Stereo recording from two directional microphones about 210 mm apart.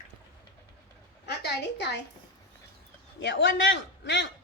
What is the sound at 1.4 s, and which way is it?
Speech, 55° left (ahead or behind).